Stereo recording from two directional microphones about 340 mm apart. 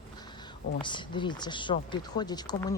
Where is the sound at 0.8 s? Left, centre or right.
Centre.